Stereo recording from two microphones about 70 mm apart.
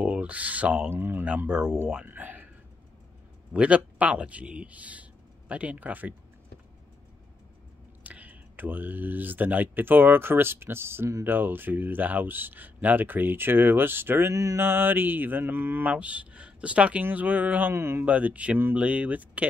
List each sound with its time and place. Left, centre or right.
0.0 s speech: centre
1.5 s speech: centre
2.0 s a sound: right
3.5 s speech: centre
8.0 s speech: right
14.3 s mantra: right
14.6 s speech: right
17.7 s speech: right
18.0 s speech: right